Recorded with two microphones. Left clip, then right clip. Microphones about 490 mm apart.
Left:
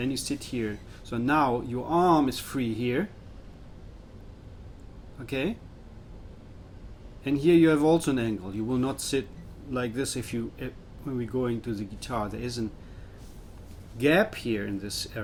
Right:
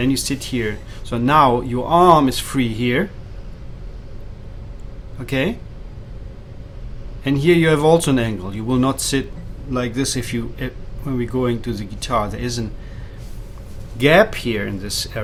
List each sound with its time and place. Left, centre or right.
0.0 s speech: right
5.2 s speech: right
7.3 s speech: right
14.0 s speech: centre